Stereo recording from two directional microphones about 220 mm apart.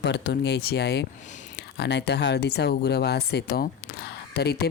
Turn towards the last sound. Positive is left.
turn(degrees=45)  # may be behind; listen again after turning